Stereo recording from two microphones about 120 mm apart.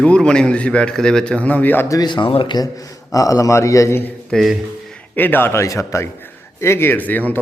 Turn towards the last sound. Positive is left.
turn(degrees=15)  # may be behind; listen again after turning